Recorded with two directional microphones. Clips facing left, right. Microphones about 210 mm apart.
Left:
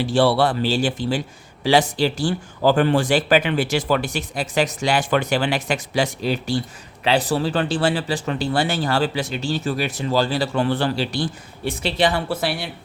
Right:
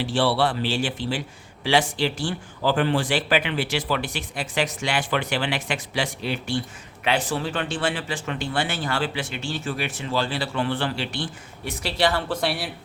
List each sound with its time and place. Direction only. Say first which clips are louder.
0.0 s speech: left 4 dB; 40° left (ahead or behind)
11.8 s speech: left 2 dB; 20° left (ahead or behind)
12.4 s speech: left 1 dB; centre (ahead or behind)